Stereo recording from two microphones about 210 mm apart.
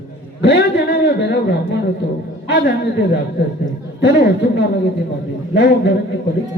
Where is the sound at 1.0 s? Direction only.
55° left (ahead or behind).